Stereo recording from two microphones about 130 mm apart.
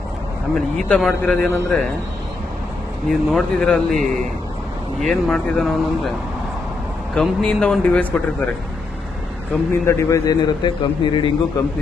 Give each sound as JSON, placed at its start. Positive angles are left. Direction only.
{"t": 0.5, "sound": "speech", "side_deg": 0}
{"t": 3.1, "sound": "speech", "side_deg": 0}
{"t": 9.8, "sound": "a man's voice", "side_deg": 25}